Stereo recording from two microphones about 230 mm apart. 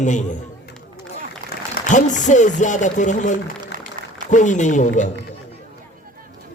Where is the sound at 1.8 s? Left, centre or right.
Left.